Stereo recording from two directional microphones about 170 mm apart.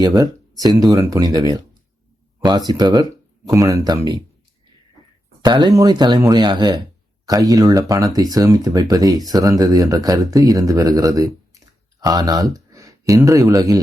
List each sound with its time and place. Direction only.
0.0 s speech: 25° right (ahead or behind)
5.4 s speech: 25° right (ahead or behind)